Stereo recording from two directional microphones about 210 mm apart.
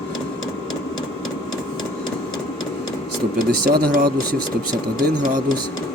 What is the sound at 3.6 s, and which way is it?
Speech, 45° right (ahead or behind).